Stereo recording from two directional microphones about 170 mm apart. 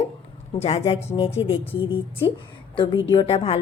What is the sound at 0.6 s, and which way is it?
Speech, 35° left (ahead or behind).